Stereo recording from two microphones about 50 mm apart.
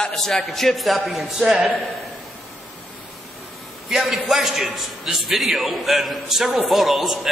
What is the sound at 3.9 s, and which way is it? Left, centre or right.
A man's voice, centre.